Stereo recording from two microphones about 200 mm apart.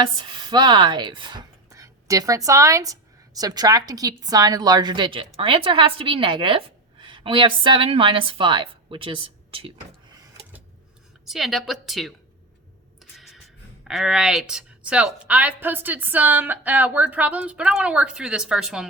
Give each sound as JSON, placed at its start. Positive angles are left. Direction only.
{"t": 0.0, "sound": "a woman's voice", "side_deg": -25}
{"t": 11.3, "sound": "a woman's voice", "side_deg": 0}
{"t": 13.0, "sound": "a sound", "side_deg": 0}
{"t": 13.8, "sound": "a woman's voice", "side_deg": -5}